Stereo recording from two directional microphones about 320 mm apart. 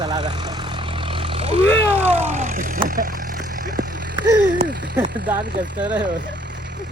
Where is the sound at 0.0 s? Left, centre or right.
Centre.